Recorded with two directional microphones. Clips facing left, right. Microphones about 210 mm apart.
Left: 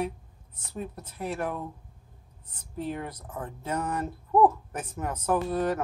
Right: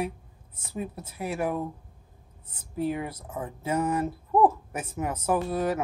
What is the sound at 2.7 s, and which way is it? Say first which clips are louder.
Speech: right 4 dB; 10° right (ahead or behind).